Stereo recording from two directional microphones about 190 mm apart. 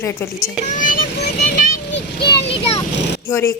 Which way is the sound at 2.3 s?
30° left (ahead or behind).